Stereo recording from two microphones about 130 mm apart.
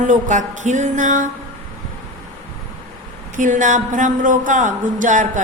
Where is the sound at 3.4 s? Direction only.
75° right (ahead or behind).